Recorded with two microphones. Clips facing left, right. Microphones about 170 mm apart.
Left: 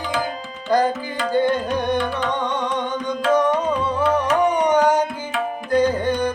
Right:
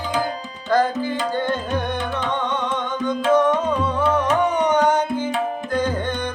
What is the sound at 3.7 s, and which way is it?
Music, 10° left (ahead or behind).